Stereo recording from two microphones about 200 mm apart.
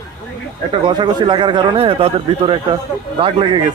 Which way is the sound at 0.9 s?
20° right (ahead or behind).